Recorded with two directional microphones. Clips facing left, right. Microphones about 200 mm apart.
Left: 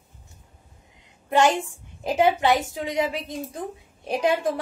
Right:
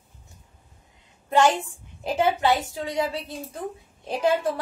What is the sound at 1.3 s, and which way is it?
A woman's voice, 20° left (ahead or behind).